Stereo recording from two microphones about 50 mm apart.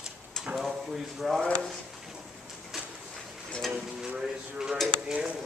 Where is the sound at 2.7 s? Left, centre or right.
Centre.